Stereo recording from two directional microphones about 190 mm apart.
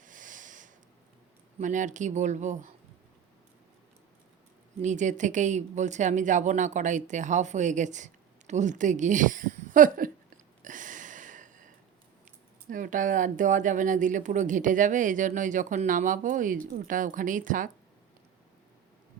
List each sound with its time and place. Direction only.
0.0 s a sound: 45° right (ahead or behind)
1.5 s speech: 40° right (ahead or behind)
4.8 s speech: 40° right (ahead or behind)
12.7 s speech: 45° right (ahead or behind)